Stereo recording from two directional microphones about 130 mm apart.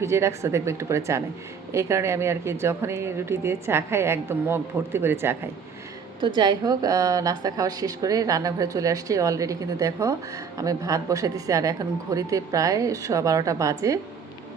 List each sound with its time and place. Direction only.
0.0 s a woman's voice: 20° right (ahead or behind)
6.2 s a woman's voice: 35° right (ahead or behind)